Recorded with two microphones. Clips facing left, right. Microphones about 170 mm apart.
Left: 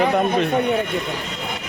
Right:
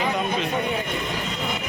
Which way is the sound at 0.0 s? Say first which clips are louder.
Left 7 dB; 55° left (ahead or behind).